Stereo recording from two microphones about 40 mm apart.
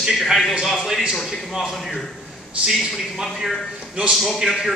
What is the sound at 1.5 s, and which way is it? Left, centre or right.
Speech, centre.